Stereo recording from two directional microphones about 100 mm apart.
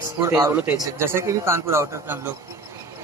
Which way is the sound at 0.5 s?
20° right (ahead or behind).